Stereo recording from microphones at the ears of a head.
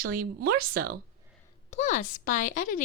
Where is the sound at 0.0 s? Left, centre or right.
Right.